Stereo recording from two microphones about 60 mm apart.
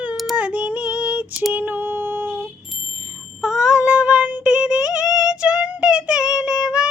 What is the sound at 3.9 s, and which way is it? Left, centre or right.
Child singing, centre.